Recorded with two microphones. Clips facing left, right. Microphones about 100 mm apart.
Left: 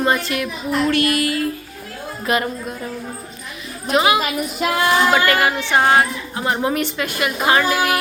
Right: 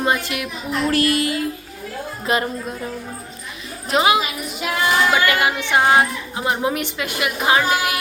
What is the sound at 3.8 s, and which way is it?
Speech, 25° right (ahead or behind).